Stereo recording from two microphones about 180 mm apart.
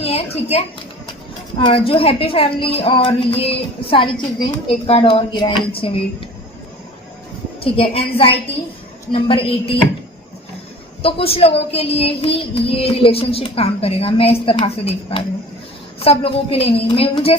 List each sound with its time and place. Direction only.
0.0 s a sound: 35° left (ahead or behind)
1.5 s a woman's voice: 30° left (ahead or behind)
7.6 s a woman's voice: 30° left (ahead or behind)
11.0 s a woman's voice: 30° left (ahead or behind)